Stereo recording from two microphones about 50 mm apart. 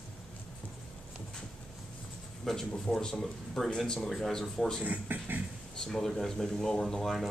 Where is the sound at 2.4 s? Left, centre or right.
Centre.